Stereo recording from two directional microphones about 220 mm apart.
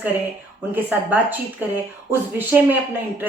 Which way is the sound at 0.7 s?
10° right (ahead or behind).